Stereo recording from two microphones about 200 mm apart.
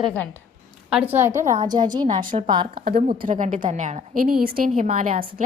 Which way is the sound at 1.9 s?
20° right (ahead or behind).